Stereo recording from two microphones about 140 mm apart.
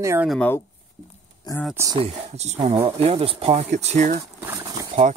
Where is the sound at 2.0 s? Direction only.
50° right (ahead or behind).